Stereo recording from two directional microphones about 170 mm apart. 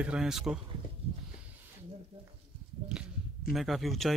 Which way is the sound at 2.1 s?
35° right (ahead or behind).